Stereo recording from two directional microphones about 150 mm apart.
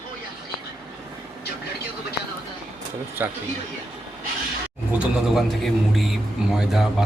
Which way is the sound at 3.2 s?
15° right (ahead or behind).